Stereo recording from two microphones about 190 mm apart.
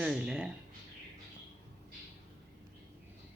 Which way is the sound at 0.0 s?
5° right (ahead or behind).